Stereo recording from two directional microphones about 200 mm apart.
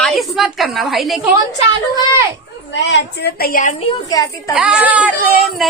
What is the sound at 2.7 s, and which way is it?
A woman's voice, 60° left (ahead or behind).